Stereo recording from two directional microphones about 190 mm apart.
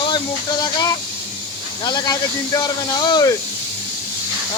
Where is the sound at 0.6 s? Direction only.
20° left (ahead or behind).